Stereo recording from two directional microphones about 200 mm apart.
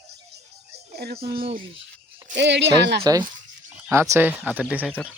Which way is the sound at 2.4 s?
60° right (ahead or behind).